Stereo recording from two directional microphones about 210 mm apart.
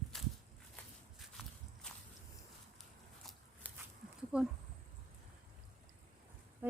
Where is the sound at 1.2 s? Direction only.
Centre (ahead or behind).